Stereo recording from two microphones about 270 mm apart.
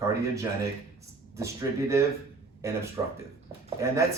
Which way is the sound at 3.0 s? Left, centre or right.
Centre.